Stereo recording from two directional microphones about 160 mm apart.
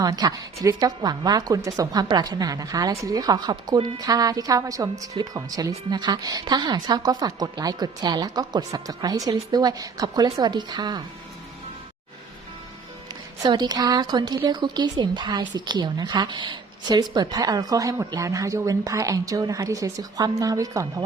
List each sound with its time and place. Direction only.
0.0 s a woman's voice: 25° right (ahead or behind)
13.4 s a woman's voice: 25° right (ahead or behind)